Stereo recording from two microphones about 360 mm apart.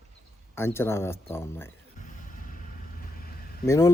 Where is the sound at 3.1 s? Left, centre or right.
Left.